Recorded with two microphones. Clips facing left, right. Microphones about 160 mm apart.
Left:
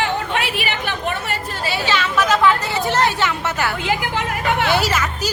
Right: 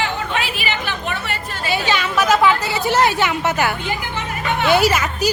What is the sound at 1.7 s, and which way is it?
A woman's voice, 15° right (ahead or behind).